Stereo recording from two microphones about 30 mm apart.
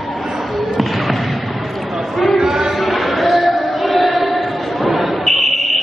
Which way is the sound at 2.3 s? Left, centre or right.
Centre.